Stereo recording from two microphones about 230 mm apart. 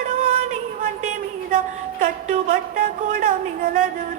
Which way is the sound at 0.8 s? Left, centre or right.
Right.